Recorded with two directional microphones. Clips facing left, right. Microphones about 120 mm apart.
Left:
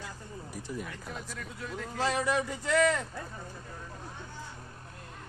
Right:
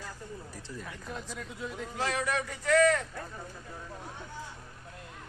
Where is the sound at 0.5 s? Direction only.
15° left (ahead or behind).